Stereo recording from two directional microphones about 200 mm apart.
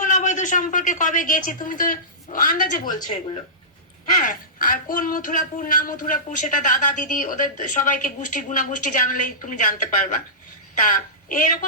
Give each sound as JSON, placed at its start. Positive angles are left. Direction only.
{"t": 0.0, "sound": "a man's voice", "side_deg": 40}
{"t": 4.2, "sound": "a woman's voice", "side_deg": 45}